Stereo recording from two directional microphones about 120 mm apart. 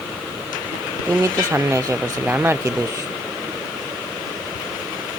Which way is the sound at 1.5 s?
25° right (ahead or behind).